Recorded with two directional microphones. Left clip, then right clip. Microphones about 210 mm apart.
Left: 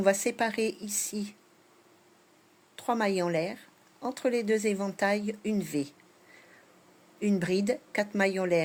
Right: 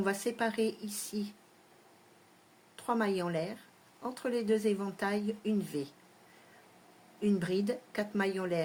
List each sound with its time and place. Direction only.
0.0 s speech: 30° left (ahead or behind)
2.7 s speech: 30° left (ahead or behind)
7.2 s speech: 30° left (ahead or behind)